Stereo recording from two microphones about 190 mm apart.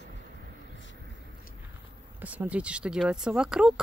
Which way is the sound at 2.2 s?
10° right (ahead or behind).